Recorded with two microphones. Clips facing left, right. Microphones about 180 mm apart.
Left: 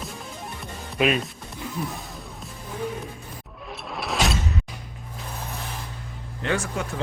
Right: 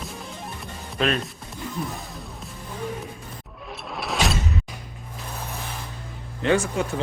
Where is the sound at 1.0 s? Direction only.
10° left (ahead or behind).